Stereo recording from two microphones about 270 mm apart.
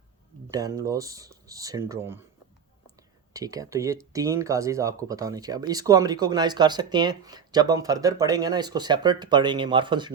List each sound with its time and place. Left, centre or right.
0.4 s speech: centre
3.3 s speech: centre